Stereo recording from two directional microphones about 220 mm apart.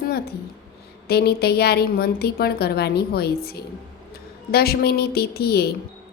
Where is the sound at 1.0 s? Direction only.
45° left (ahead or behind).